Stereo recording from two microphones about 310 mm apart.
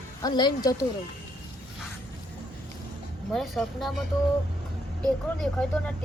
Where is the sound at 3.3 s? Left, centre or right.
Centre.